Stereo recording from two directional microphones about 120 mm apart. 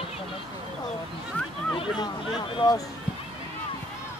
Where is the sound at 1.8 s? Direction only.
45° left (ahead or behind).